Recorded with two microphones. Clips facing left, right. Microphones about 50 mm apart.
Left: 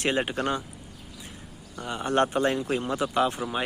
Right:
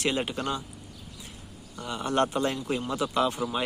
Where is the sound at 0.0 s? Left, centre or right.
Left.